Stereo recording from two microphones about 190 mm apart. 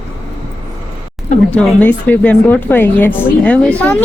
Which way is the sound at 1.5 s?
10° left (ahead or behind).